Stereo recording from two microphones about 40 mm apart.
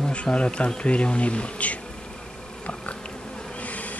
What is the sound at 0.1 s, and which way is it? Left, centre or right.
Speech, left.